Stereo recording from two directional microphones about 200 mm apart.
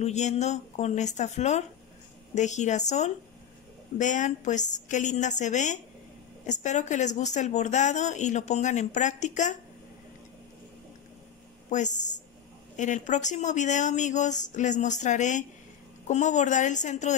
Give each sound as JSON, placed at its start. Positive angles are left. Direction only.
{"t": 0.0, "sound": "speech", "side_deg": 35}
{"t": 11.7, "sound": "speech", "side_deg": 35}